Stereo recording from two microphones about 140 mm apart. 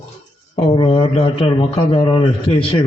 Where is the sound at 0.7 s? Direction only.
40° left (ahead or behind).